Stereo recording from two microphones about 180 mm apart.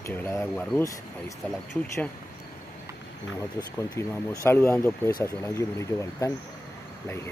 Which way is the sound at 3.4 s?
15° left (ahead or behind).